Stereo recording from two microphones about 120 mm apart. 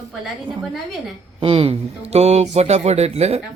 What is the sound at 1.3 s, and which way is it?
Speech, 50° right (ahead or behind).